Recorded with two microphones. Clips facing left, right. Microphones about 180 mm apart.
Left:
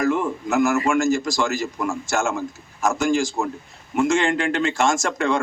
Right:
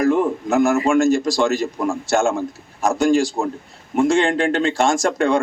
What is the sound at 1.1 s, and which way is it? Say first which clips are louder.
A man's voice: right 4 dB; 35° right (ahead or behind).